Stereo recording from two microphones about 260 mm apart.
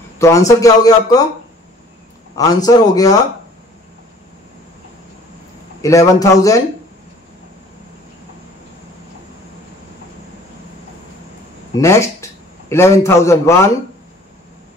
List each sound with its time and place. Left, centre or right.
0.2 s a man's voice: centre
2.3 s a man's voice: centre
5.8 s a man's voice: centre
11.7 s a man's voice: centre